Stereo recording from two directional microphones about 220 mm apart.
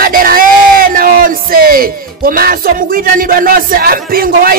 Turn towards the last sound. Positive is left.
turn(degrees=-40)  # may be behind; listen again after turning